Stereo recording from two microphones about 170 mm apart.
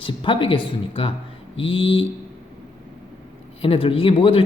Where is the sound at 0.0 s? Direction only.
30° left (ahead or behind).